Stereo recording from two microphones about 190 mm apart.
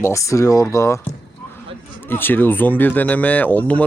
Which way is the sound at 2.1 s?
10° left (ahead or behind).